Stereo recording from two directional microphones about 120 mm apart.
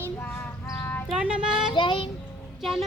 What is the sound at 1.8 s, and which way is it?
Child singing, 45° left (ahead or behind).